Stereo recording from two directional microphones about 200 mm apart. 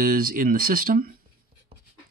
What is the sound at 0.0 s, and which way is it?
Speech, 45° right (ahead or behind).